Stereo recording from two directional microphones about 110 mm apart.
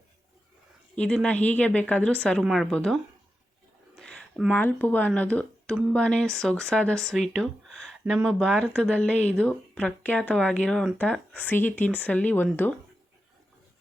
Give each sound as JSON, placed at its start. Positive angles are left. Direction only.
{"t": 0.9, "sound": "speech", "side_deg": 10}
{"t": 3.9, "sound": "a sound", "side_deg": 5}
{"t": 4.5, "sound": "speech", "side_deg": 15}